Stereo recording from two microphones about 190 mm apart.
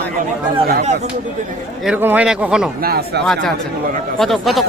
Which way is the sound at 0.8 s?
35° right (ahead or behind).